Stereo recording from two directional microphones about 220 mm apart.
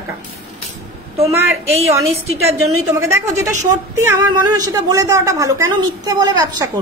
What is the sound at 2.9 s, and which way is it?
Speech, 15° right (ahead or behind).